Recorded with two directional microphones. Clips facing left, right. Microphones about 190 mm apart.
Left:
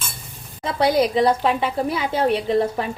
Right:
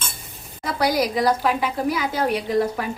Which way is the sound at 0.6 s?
25° left (ahead or behind).